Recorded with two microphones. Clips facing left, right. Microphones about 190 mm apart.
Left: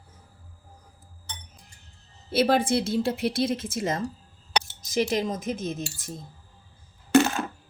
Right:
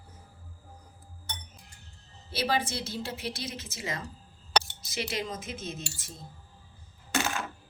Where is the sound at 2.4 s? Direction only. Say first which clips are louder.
Left 9 dB; 55° left (ahead or behind).